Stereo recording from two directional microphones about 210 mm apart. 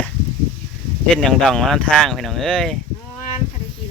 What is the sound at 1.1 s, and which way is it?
Speech, 5° left (ahead or behind).